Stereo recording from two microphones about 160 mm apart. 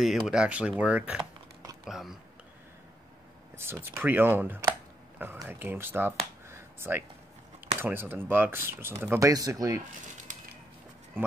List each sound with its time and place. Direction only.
0.0 s speech: centre (ahead or behind)
3.5 s speech: 15° right (ahead or behind)